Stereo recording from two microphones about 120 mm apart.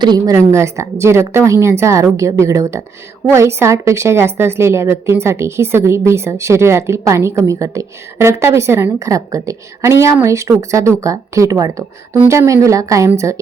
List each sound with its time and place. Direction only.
0.0 s a woman's voice: 30° right (ahead or behind)